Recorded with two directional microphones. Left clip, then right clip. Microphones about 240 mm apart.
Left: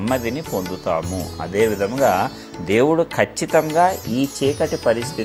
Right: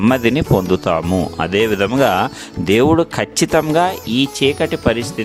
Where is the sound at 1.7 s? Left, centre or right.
Right.